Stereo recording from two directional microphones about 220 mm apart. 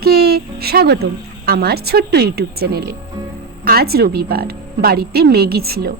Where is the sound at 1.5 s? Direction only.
45° right (ahead or behind).